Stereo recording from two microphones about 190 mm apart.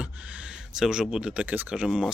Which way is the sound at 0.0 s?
5° right (ahead or behind).